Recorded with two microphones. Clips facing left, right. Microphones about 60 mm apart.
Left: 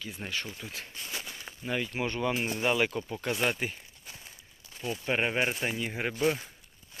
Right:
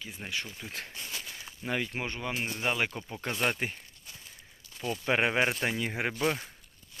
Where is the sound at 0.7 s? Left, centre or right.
Right.